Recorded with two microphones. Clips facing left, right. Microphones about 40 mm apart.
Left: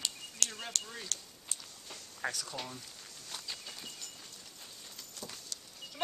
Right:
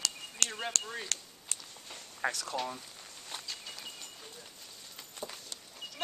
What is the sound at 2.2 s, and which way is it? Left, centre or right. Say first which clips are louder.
Speech: right 4 dB; right.